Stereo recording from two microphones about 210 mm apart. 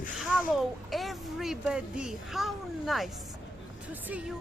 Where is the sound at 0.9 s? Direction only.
Centre (ahead or behind).